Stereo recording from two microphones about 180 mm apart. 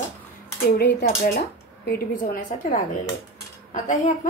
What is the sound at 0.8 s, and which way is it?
Speech, 70° left (ahead or behind).